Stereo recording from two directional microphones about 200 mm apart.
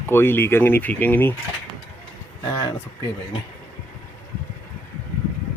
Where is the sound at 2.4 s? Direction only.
20° left (ahead or behind).